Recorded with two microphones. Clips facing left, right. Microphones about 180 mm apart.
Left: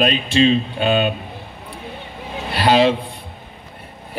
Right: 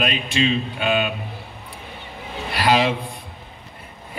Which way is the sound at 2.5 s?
30° left (ahead or behind).